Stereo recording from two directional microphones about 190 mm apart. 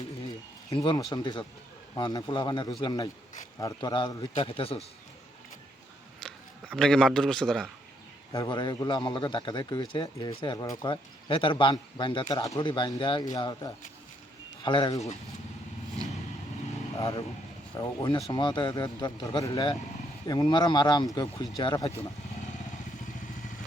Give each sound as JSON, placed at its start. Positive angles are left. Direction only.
{"t": 0.8, "sound": "a man's voice", "side_deg": 20}
{"t": 6.1, "sound": "a man's voice", "side_deg": 5}
{"t": 8.3, "sound": "a man's voice", "side_deg": 20}
{"t": 17.7, "sound": "a man's voice", "side_deg": 25}